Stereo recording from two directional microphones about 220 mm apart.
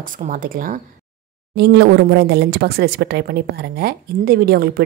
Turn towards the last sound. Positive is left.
turn(degrees=-45)  # may be behind; listen again after turning